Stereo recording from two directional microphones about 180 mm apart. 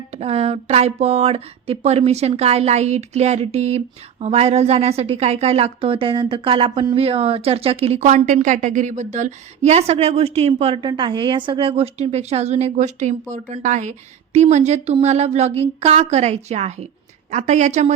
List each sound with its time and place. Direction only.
0.1 s a woman's voice: 35° right (ahead or behind)